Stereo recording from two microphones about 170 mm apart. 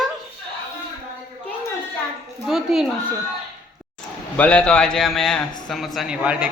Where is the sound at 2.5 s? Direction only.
Centre (ahead or behind).